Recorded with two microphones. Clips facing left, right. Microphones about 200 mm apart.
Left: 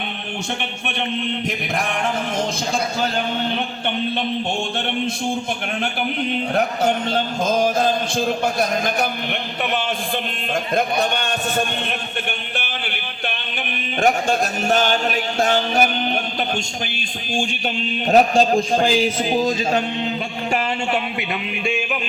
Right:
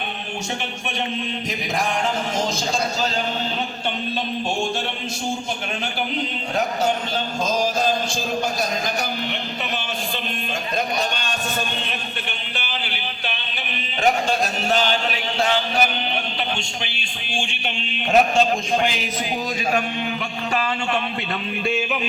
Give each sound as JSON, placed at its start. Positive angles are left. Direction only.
{"t": 0.9, "sound": "a man's voice", "side_deg": 60}
{"t": 3.0, "sound": "a man's voice", "side_deg": 55}
{"t": 5.8, "sound": "a man's voice", "side_deg": 55}
{"t": 10.8, "sound": "a man's voice", "side_deg": 55}
{"t": 14.0, "sound": "a sound", "side_deg": 50}
{"t": 18.1, "sound": "a man's voice", "side_deg": 35}